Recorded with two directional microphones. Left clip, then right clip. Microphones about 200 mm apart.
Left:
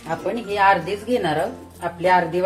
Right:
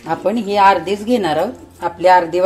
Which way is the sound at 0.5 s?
55° right (ahead or behind).